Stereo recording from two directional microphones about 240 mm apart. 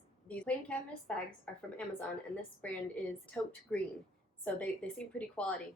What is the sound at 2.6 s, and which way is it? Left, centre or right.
A woman's voice, centre.